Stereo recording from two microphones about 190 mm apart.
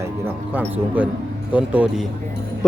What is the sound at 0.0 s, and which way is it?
Music, 10° right (ahead or behind).